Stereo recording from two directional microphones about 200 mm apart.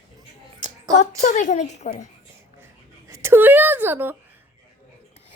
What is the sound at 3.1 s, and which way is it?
A woman's voice, 10° right (ahead or behind).